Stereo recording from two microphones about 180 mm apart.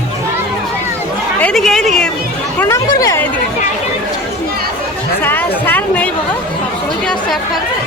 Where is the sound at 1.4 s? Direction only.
5° left (ahead or behind).